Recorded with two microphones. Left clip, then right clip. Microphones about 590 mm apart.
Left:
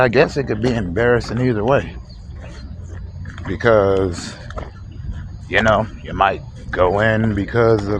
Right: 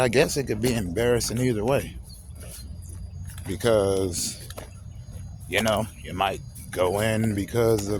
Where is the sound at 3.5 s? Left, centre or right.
Right.